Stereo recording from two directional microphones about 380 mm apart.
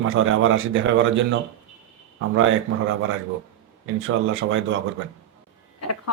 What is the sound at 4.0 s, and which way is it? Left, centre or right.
Speech, right.